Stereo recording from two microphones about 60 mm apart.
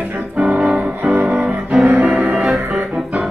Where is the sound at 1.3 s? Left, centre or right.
Right.